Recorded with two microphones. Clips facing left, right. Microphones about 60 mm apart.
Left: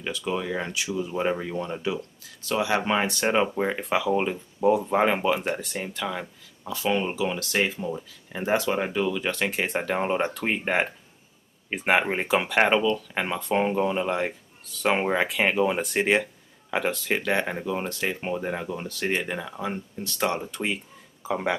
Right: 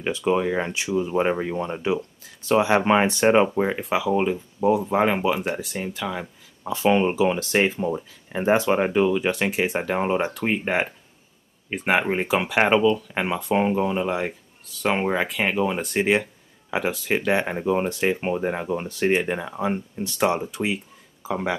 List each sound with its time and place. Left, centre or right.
0.0 s speech: right
3.4 s speech: centre
6.6 s speech: right; by 21.5 s centre